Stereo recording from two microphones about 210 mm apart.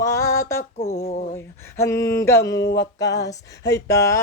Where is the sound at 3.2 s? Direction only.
15° left (ahead or behind).